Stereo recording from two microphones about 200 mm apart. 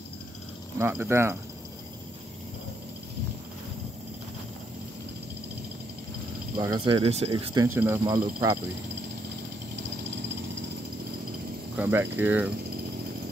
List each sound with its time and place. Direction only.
0.7 s speech: 10° right (ahead or behind)
6.6 s speech: 20° right (ahead or behind)
7.6 s speech: 10° right (ahead or behind)
11.7 s speech: 10° right (ahead or behind)